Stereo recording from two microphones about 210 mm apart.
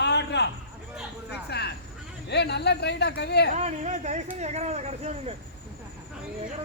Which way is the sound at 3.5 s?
35° right (ahead or behind).